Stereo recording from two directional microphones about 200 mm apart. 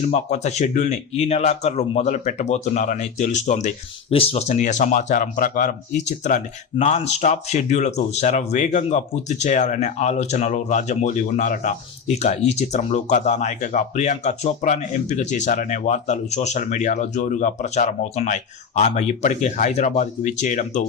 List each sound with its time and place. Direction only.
0.1 s speech: 35° left (ahead or behind)